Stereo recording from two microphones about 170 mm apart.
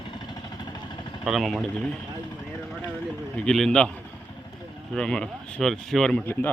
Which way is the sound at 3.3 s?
5° left (ahead or behind).